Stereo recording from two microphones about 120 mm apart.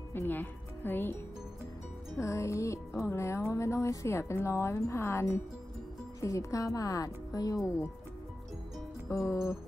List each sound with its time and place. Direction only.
0.1 s speech: 15° left (ahead or behind)
2.1 s speech: 25° left (ahead or behind)
9.1 s speech: 25° left (ahead or behind)